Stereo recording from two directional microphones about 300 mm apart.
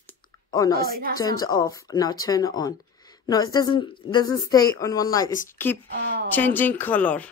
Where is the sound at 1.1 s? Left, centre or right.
Centre.